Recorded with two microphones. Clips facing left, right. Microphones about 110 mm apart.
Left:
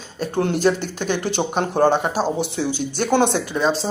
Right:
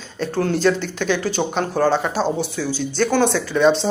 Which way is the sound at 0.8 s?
50° left (ahead or behind).